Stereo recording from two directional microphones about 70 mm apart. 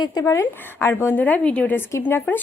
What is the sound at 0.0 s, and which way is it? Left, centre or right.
Speech, left.